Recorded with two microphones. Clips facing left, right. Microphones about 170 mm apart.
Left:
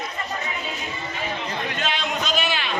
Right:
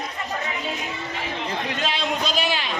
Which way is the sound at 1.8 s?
35° right (ahead or behind).